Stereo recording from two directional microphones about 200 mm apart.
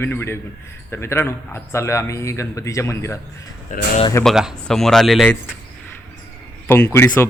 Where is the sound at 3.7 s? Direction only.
40° left (ahead or behind).